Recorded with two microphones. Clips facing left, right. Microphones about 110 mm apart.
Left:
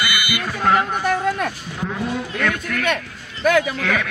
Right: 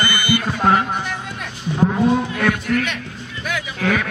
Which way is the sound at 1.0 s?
50° left (ahead or behind).